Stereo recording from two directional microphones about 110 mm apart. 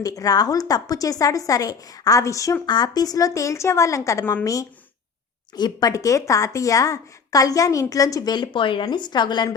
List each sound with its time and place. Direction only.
0.0 s a woman's voice: 35° left (ahead or behind)
5.5 s a woman's voice: 35° left (ahead or behind)